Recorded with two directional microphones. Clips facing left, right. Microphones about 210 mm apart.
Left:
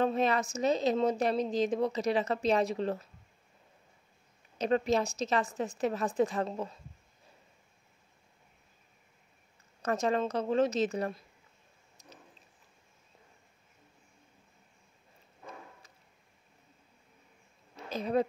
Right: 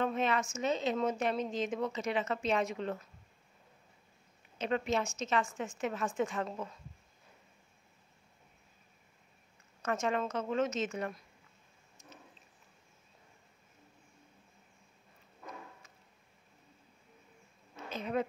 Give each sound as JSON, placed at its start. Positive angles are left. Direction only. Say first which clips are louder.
{"t": 0.0, "sound": "speech", "louder": "left 4 dB", "side_deg": 35}
{"t": 4.6, "sound": "speech", "louder": "left 5 dB", "side_deg": 35}
{"t": 9.8, "sound": "speech", "louder": "left 4 dB", "side_deg": 35}
{"t": 12.0, "sound": "a sound", "louder": "left 1 dB", "side_deg": 35}
{"t": 17.8, "sound": "speech", "louder": "left 5 dB", "side_deg": 35}